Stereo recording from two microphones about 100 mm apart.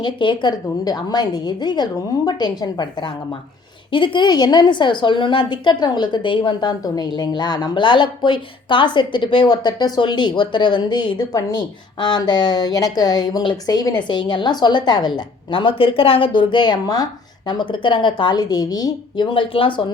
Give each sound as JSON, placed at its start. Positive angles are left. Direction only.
{"t": 0.0, "sound": "a woman's voice", "side_deg": 50}
{"t": 3.9, "sound": "a woman's voice", "side_deg": 55}